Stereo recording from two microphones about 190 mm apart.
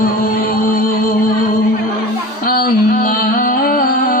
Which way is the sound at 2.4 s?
50° left (ahead or behind).